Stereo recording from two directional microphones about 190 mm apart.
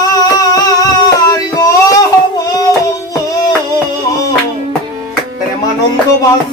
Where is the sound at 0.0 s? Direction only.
20° left (ahead or behind).